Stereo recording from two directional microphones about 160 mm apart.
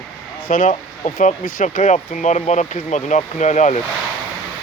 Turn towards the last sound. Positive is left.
turn(degrees=50)  # may be behind; listen again after turning